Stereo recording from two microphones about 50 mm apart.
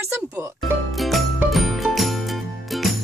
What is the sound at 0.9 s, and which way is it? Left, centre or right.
Music, centre.